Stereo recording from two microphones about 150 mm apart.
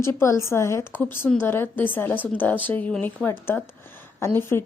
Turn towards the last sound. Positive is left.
turn(degrees=15)  # may be behind; listen again after turning